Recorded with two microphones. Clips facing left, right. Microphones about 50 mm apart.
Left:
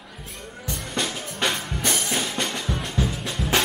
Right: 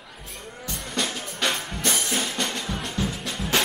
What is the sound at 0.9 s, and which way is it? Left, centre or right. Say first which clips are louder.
Drum kit: even; centre.